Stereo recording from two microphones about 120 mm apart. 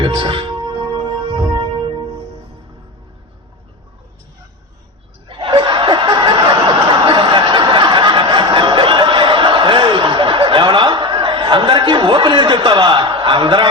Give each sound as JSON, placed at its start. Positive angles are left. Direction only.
{"t": 0.0, "sound": "music", "side_deg": -40}
{"t": 5.3, "sound": "laughter", "side_deg": -45}
{"t": 7.1, "sound": "a sound", "side_deg": -40}